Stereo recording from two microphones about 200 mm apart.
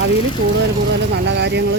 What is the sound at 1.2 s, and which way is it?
Speech, 60° right (ahead or behind).